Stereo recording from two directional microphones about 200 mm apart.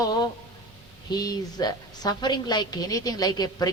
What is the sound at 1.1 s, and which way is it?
A woman's voice, 20° left (ahead or behind).